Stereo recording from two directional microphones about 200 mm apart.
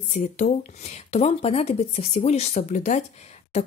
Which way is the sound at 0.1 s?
35° left (ahead or behind).